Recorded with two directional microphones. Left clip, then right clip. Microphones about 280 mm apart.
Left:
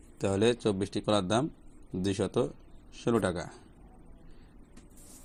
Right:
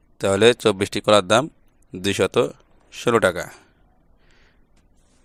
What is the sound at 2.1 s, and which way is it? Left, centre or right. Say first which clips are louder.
Speech: right 11 dB; right.